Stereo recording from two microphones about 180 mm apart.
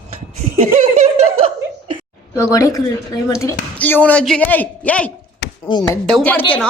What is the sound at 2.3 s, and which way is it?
A man's voice, 15° left (ahead or behind).